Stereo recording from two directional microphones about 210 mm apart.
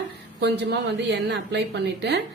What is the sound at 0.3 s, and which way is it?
A woman's voice, 55° right (ahead or behind).